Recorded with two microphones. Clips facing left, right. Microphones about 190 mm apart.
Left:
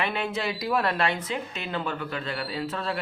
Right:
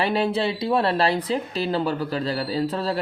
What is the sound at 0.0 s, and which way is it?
Speech, 35° right (ahead or behind).